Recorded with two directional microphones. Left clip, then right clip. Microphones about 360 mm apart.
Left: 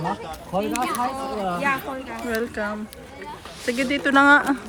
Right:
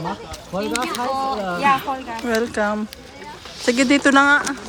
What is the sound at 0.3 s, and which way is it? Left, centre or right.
Speech, centre.